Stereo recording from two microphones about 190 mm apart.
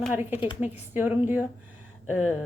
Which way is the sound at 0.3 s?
30° left (ahead or behind).